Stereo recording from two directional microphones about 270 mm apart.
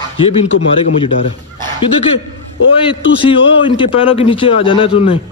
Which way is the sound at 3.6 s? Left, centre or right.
Centre.